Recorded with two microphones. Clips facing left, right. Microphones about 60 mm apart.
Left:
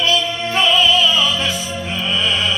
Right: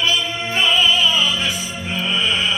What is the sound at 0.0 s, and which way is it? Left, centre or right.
Music, centre.